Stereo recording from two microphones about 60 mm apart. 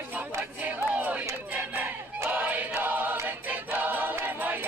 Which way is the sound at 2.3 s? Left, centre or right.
Right.